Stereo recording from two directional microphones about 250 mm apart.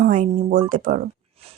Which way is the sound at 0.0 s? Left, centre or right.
Right.